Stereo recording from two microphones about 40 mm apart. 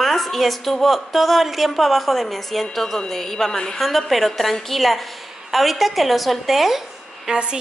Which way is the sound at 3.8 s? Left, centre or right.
Centre.